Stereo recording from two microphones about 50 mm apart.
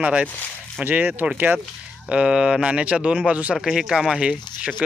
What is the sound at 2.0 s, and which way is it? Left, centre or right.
Speech, right.